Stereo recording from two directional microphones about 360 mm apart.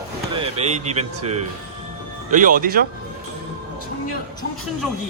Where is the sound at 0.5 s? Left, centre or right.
Centre.